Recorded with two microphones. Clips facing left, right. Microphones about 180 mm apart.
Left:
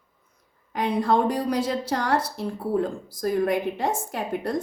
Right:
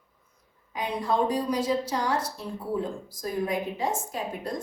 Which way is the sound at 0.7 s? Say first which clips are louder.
Left 5 dB; 70° left (ahead or behind).